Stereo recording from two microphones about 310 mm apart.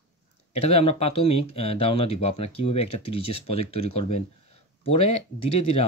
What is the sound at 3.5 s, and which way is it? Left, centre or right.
Speech, left.